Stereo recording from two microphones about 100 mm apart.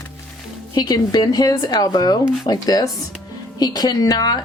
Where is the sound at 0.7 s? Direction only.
40° left (ahead or behind).